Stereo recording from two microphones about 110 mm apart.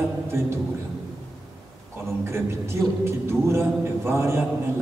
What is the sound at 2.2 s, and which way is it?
A man's voice, 25° right (ahead or behind).